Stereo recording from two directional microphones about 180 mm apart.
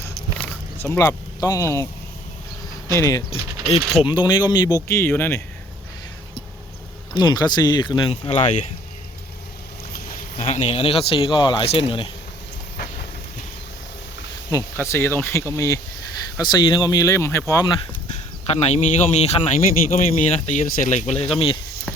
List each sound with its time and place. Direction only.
0.9 s speech: 20° left (ahead or behind)
2.9 s speech: 15° left (ahead or behind)
3.2 s a man's voice: 30° left (ahead or behind); by 5.4 s 10° left (ahead or behind)
7.1 s speech: 25° left (ahead or behind); by 8.6 s 40° left (ahead or behind)
10.3 s a man's voice: 35° left (ahead or behind)
14.5 s speech: 15° left (ahead or behind)
18.4 s a man's voice: 35° left (ahead or behind)